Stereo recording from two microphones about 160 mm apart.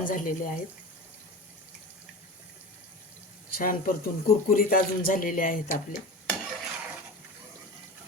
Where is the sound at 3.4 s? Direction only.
65° left (ahead or behind).